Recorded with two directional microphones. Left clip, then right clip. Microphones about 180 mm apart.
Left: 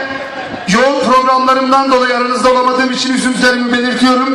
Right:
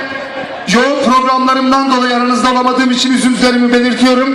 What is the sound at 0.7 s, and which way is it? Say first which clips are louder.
A man's voice: even; 40° right (ahead or behind).